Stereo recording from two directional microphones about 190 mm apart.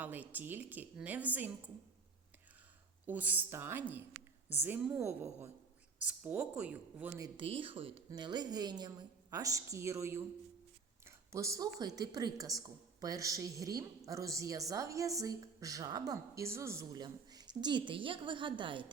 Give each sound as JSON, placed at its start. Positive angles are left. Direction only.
{"t": 0.0, "sound": "a woman's voice", "side_deg": -10}
{"t": 3.1, "sound": "a woman's voice", "side_deg": -10}
{"t": 7.3, "sound": "a woman's voice", "side_deg": -30}